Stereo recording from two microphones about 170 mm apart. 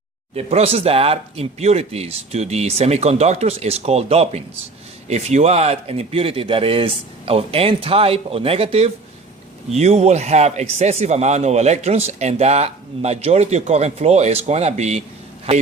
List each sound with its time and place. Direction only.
0.3 s speech: 35° right (ahead or behind)